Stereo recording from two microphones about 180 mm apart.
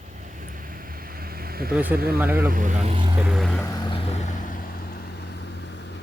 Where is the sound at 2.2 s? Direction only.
10° right (ahead or behind).